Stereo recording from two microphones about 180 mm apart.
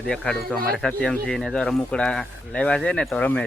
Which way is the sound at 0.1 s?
Centre (ahead or behind).